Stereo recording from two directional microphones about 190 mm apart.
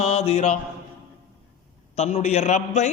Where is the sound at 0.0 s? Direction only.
35° left (ahead or behind).